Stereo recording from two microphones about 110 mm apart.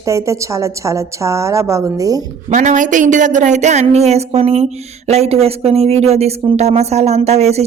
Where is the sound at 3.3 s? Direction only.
90° right.